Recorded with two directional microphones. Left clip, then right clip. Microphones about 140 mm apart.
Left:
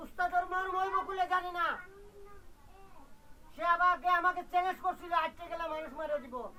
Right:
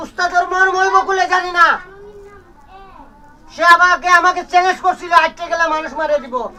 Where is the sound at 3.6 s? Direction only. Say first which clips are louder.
Right 19 dB; 15° right (ahead or behind).